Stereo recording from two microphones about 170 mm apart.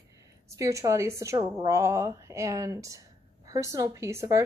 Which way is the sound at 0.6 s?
20° right (ahead or behind).